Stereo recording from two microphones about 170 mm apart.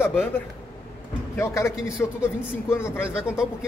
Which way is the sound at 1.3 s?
15° left (ahead or behind).